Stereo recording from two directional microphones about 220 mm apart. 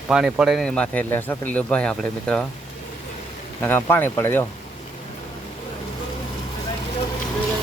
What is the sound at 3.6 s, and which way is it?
Speech, 10° left (ahead or behind).